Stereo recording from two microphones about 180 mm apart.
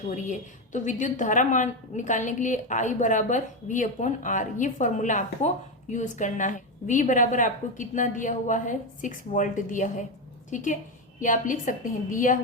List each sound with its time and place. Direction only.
0.1 s a woman's voice: 45° left (ahead or behind)